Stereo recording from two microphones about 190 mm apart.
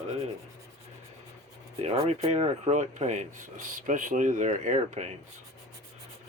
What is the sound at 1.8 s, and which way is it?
Rub, 35° right (ahead or behind).